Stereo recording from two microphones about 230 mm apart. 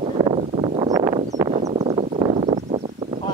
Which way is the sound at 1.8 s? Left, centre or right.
Right.